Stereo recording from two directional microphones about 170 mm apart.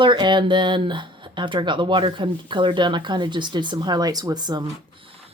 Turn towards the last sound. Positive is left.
turn(degrees=-25)  # may be behind; listen again after turning